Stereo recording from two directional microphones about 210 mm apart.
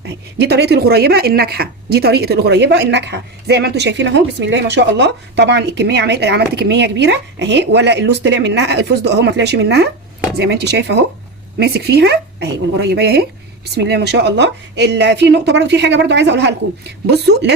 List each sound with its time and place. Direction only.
0.3 s a woman's voice: 50° right (ahead or behind)